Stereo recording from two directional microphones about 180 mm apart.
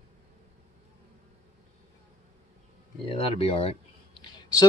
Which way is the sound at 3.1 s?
30° left (ahead or behind).